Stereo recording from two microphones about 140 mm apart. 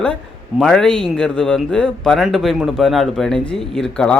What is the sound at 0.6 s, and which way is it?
Speech, 5° left (ahead or behind).